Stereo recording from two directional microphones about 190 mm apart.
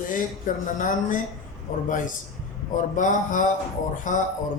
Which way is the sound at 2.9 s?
40° left (ahead or behind).